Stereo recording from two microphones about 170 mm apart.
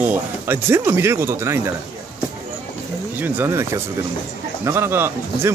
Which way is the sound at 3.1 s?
10° right (ahead or behind).